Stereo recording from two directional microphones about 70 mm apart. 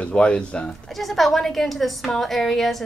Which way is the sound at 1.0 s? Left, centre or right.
Centre.